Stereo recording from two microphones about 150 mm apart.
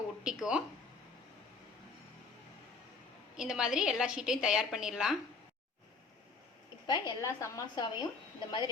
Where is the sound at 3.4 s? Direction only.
5° right (ahead or behind).